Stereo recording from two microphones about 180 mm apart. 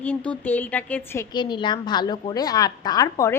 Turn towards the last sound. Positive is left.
turn(degrees=20)  # may be behind; listen again after turning